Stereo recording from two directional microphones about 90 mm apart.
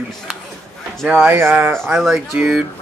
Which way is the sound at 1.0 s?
10° right (ahead or behind).